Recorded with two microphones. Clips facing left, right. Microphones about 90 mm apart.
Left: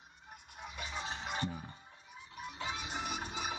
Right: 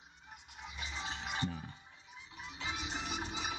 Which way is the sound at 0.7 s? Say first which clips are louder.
Left 2 dB; 50° left (ahead or behind).